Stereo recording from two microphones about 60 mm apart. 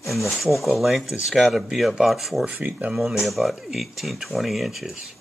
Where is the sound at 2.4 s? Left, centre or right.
Right.